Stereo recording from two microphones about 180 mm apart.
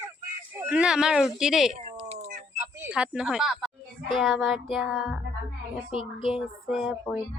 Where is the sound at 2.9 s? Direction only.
5° right (ahead or behind).